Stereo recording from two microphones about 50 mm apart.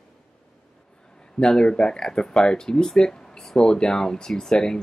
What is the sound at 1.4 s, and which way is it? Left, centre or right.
Speech, centre.